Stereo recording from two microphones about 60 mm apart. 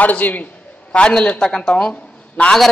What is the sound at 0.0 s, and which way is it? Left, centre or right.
A man's voice, left.